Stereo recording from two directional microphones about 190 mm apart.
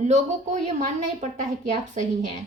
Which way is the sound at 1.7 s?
40° right (ahead or behind).